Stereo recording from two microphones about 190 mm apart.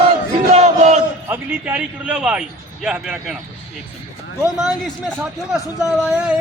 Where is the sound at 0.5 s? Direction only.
35° right (ahead or behind).